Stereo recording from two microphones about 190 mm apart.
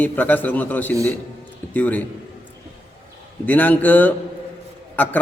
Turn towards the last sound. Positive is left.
turn(degrees=10)  # may be behind; listen again after turning